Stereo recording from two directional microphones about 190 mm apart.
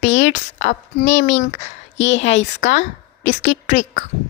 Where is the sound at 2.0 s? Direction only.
75° left (ahead or behind).